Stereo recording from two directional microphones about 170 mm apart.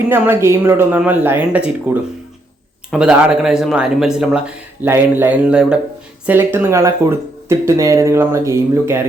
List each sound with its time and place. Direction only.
0.1 s speech: 15° right (ahead or behind)